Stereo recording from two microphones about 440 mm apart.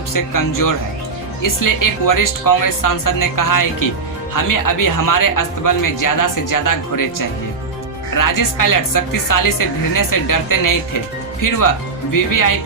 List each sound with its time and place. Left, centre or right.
0.1 s speech: left
8.1 s speech: left